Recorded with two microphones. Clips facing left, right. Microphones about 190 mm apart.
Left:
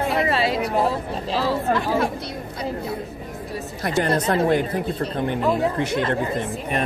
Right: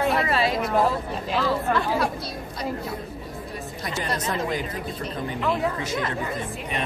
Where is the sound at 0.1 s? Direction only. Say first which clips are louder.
Left 2 dB; 30° left (ahead or behind).